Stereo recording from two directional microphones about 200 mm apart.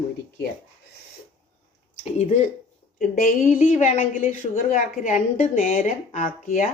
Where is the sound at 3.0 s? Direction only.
45° left (ahead or behind).